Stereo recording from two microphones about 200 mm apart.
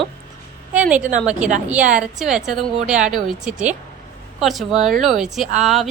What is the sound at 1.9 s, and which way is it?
A woman's voice, 5° right (ahead or behind).